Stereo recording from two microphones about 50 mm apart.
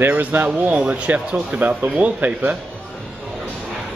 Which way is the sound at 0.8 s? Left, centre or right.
Right.